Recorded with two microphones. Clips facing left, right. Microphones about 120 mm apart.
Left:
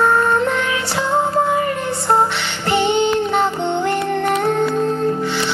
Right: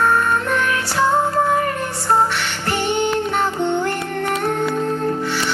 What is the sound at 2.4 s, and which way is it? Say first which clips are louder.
Music: left 4 dB; 20° left (ahead or behind).